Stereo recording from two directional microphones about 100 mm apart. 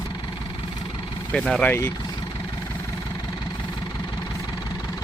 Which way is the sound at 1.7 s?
20° left (ahead or behind).